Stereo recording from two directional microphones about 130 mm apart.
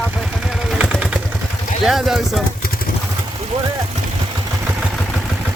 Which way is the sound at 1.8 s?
Centre (ahead or behind).